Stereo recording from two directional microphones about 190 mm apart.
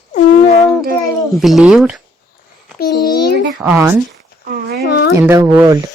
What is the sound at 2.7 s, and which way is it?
Speech, 55° left (ahead or behind).